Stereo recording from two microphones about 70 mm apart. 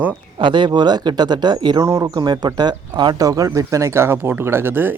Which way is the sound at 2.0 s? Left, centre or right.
Right.